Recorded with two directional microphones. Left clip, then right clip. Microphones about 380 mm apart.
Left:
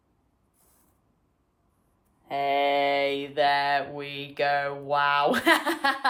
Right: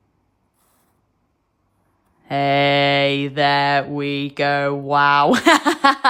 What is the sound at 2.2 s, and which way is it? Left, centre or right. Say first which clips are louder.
Mantra: right 8 dB; right.